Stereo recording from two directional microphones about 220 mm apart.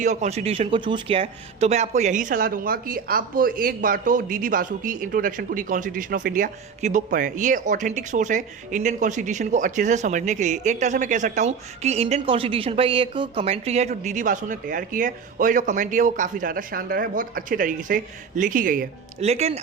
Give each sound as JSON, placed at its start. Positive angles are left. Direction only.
{"t": 0.0, "sound": "speech", "side_deg": -30}